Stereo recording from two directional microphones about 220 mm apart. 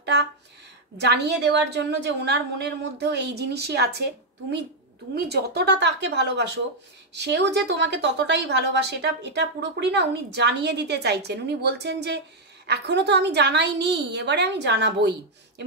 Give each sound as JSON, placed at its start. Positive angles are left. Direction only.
{"t": 0.9, "sound": "a woman's voice", "side_deg": -50}